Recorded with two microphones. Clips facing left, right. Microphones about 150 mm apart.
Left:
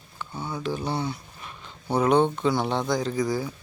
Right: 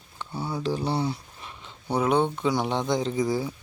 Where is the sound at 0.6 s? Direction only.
30° right (ahead or behind).